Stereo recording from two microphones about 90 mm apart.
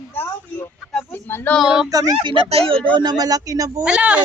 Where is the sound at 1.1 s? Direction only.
25° left (ahead or behind).